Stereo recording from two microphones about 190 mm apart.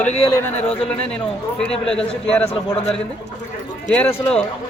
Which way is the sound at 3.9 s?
5° left (ahead or behind).